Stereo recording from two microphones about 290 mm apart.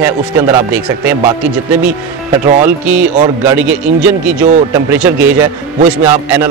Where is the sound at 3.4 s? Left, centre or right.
Centre.